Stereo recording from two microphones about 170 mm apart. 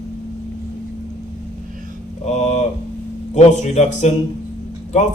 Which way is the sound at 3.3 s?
40° left (ahead or behind).